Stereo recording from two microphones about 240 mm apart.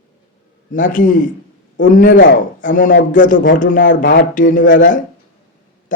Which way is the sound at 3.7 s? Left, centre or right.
Left.